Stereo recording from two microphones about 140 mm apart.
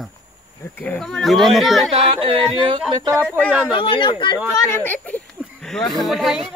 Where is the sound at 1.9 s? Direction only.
40° right (ahead or behind).